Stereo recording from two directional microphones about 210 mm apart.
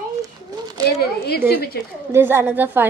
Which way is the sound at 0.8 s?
50° left (ahead or behind).